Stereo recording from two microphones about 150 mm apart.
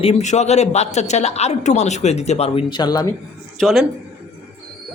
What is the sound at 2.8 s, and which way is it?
Speech, 25° left (ahead or behind).